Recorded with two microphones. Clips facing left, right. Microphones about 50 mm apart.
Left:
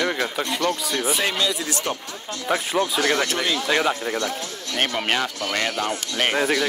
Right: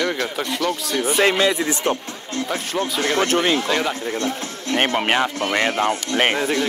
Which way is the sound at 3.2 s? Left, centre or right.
Right.